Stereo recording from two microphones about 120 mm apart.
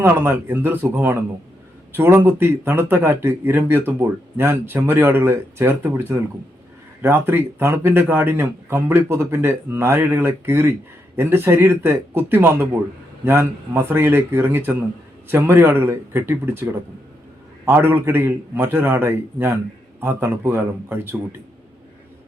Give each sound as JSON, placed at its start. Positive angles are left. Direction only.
{"t": 0.0, "sound": "speech", "side_deg": -20}